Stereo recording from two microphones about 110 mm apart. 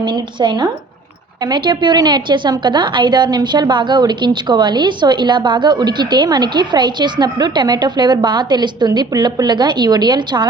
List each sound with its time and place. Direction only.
0.0 s a woman's voice: 45° right (ahead or behind)